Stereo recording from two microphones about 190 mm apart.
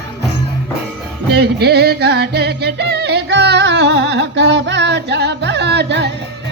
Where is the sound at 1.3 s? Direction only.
60° right (ahead or behind).